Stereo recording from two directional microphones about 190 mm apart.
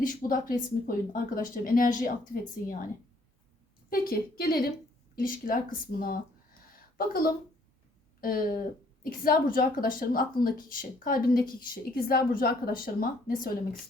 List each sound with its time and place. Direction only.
0.0 s a woman's voice: 45° left (ahead or behind)
3.8 s a woman's voice: 50° left (ahead or behind)
6.9 s a woman's voice: 50° left (ahead or behind)